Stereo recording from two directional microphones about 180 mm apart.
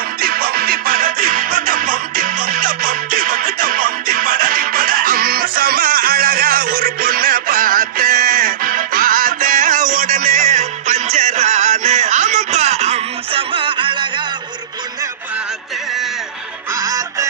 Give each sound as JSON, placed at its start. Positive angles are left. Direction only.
{"t": 0.2, "sound": "music", "side_deg": -55}
{"t": 16.7, "sound": "music", "side_deg": -20}